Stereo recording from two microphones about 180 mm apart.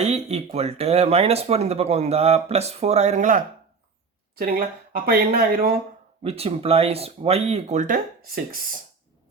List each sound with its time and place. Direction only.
0.0 s speech: 35° right (ahead or behind)
4.4 s speech: 55° right (ahead or behind)
6.2 s speech: 35° right (ahead or behind); by 8.8 s 55° right (ahead or behind)